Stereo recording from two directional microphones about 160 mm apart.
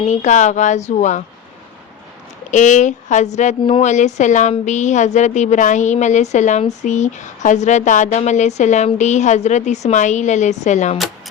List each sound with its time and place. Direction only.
0.0 s a woman's voice: 45° left (ahead or behind)
2.5 s a woman's voice: 50° left (ahead or behind)